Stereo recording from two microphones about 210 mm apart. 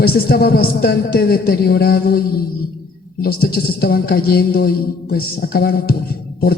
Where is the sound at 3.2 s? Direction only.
45° left (ahead or behind).